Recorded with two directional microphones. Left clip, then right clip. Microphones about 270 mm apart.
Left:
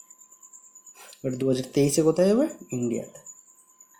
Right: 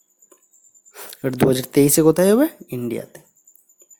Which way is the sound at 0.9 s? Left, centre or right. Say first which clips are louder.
Right 6 dB; right.